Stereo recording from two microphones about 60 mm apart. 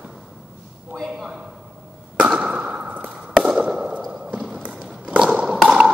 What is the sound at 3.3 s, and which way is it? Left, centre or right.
Fireworks, centre.